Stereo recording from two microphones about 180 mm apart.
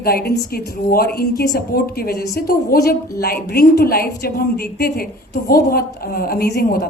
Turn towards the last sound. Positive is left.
turn(degrees=60)  # may be behind; listen again after turning